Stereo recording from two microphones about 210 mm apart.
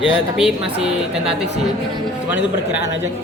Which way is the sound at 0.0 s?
5° right (ahead or behind).